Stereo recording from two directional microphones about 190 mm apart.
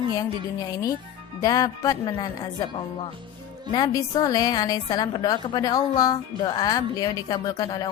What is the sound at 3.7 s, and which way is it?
A woman's voice, 20° left (ahead or behind).